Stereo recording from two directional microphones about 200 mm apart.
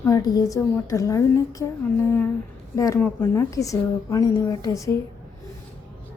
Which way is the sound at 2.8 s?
15° left (ahead or behind).